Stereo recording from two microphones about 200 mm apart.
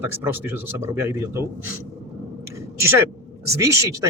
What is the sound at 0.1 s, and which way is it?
Speech, 10° right (ahead or behind).